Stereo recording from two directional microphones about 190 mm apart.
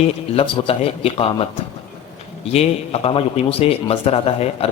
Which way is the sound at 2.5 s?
35° left (ahead or behind).